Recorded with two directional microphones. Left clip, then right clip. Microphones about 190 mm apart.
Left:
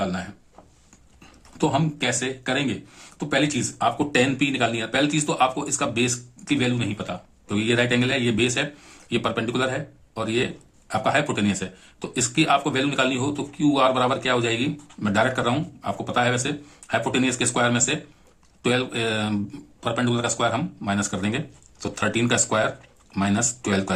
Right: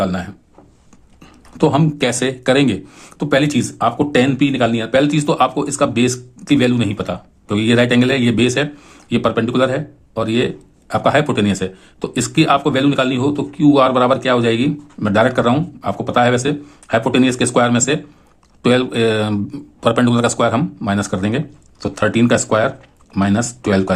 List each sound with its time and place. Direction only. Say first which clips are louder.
0.0 s speech: right 8 dB; 45° right (ahead or behind)